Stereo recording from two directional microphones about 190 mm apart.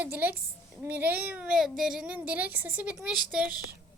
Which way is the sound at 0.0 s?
10° right (ahead or behind).